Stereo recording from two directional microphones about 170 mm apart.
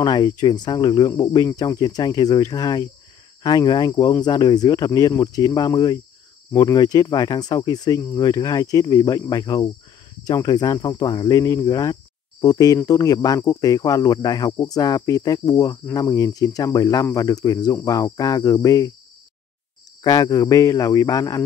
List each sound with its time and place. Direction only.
0.0 s speech: 25° left (ahead or behind)
20.0 s speech: 20° left (ahead or behind)